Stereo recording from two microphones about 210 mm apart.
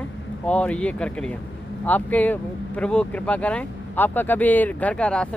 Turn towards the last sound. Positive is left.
turn(degrees=5)  # may be behind; listen again after turning